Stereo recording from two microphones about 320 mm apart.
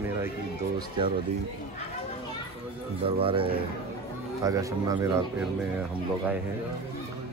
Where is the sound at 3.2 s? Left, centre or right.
Centre.